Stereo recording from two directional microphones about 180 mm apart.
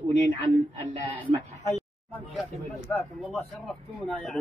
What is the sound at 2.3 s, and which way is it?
Speech, centre (ahead or behind).